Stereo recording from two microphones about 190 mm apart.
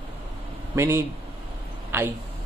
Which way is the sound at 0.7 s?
15° right (ahead or behind).